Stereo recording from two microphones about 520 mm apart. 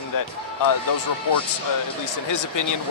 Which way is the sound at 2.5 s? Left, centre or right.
Left.